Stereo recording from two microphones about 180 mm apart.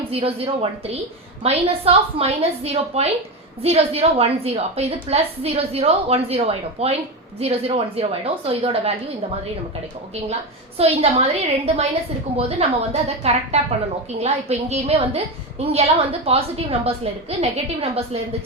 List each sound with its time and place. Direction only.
0.1 s a woman's voice: 30° right (ahead or behind)
10.8 s a woman's voice: 35° right (ahead or behind)